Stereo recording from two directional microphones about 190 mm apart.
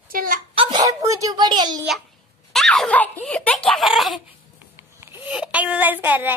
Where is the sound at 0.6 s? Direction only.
20° right (ahead or behind).